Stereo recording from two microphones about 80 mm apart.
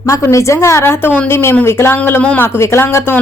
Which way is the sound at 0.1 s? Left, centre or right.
Left.